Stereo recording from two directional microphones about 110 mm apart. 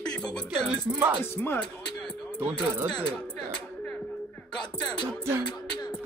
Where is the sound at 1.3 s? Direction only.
20° left (ahead or behind).